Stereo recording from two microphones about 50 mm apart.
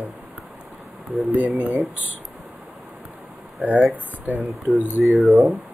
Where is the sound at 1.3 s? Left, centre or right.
Right.